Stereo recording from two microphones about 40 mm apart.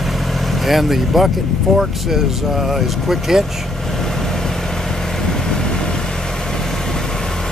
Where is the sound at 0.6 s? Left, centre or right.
Centre.